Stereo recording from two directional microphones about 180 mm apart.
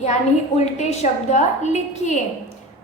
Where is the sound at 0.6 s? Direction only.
40° left (ahead or behind).